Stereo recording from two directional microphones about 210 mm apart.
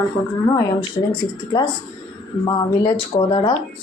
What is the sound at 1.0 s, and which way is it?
Speech, 25° left (ahead or behind).